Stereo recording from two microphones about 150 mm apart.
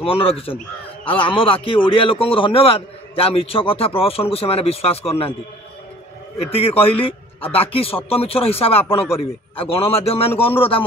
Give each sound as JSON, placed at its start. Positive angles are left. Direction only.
{"t": 0.0, "sound": "a man's voice", "side_deg": 40}
{"t": 6.5, "sound": "a man's voice", "side_deg": 40}